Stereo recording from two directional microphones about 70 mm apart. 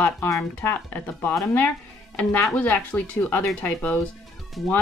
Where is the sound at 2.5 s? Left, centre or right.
Centre.